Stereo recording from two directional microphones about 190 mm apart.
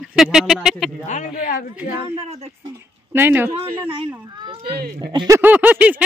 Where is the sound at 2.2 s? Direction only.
35° right (ahead or behind).